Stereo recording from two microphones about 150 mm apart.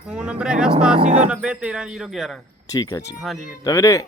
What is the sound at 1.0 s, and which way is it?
Speech, 50° right (ahead or behind).